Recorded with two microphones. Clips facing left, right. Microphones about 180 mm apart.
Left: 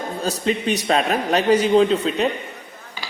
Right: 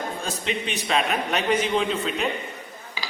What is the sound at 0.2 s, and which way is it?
A woman's voice, 40° left (ahead or behind).